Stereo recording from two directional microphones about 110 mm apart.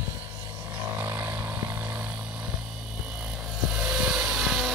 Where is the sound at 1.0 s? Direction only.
15° right (ahead or behind).